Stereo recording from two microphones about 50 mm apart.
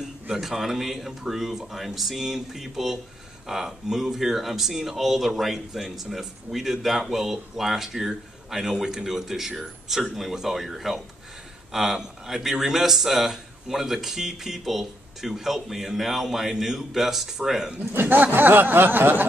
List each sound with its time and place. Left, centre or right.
0.0 s speech: centre
17.9 s speech: right